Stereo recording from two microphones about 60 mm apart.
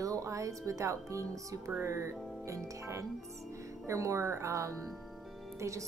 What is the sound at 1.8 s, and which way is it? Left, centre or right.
Speech, right.